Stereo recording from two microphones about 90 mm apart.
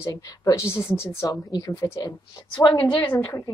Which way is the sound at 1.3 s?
45° left (ahead or behind).